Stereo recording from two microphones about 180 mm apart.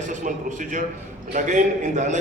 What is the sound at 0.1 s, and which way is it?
A man's voice, 45° right (ahead or behind).